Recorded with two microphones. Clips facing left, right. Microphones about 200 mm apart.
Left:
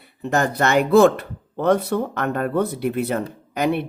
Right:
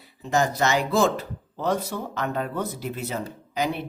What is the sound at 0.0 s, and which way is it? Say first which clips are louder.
Speech: left 2 dB; 60° left (ahead or behind).